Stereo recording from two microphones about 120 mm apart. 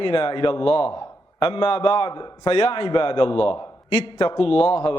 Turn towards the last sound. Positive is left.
turn(degrees=50)  # may be behind; listen again after turning